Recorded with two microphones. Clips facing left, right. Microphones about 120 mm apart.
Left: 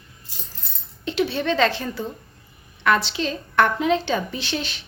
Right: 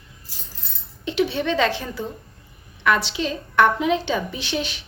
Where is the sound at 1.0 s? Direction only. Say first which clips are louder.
Right 1 dB; 15° right (ahead or behind).